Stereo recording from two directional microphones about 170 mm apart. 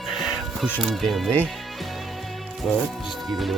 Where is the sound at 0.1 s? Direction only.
Centre (ahead or behind).